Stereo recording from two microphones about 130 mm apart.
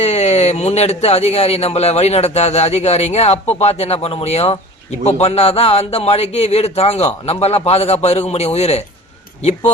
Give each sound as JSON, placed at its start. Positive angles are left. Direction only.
{"t": 0.0, "sound": "a man's voice", "side_deg": 55}